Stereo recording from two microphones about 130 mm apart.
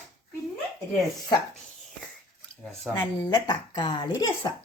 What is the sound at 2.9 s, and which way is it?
Speech, 35° left (ahead or behind).